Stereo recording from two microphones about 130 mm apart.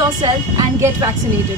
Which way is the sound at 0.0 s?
30° right (ahead or behind).